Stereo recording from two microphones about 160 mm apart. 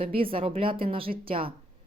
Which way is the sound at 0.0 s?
35° right (ahead or behind).